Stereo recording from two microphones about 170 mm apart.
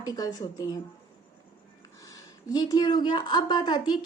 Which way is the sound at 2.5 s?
25° left (ahead or behind).